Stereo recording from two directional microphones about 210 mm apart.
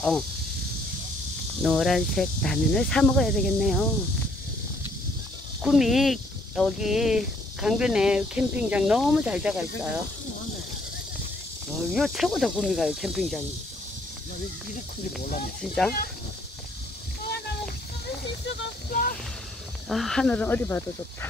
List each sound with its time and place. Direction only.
1.6 s speech: centre (ahead or behind)
5.6 s speech: centre (ahead or behind)
11.9 s speech: centre (ahead or behind)
15.6 s speech: centre (ahead or behind)
18.9 s a sound: 40° left (ahead or behind)
19.9 s speech: centre (ahead or behind)